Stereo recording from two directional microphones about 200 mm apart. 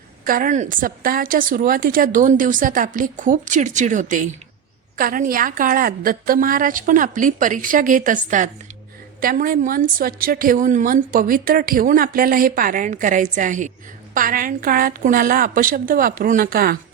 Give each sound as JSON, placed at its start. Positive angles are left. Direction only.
{"t": 0.3, "sound": "a woman's voice", "side_deg": -40}